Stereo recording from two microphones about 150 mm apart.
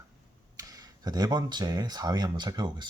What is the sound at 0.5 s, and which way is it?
Speech, 25° right (ahead or behind).